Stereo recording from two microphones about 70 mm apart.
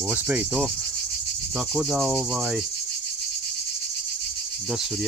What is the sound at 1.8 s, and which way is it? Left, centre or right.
Cricket, centre.